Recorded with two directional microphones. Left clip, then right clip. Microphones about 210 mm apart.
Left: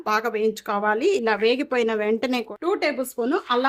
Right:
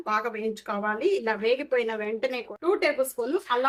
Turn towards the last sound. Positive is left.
turn(degrees=40)  # may be behind; listen again after turning